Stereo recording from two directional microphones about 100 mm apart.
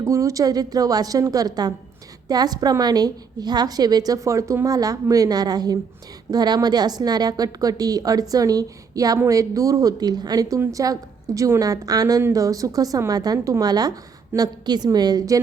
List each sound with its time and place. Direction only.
0.0 s a woman's voice: 30° right (ahead or behind)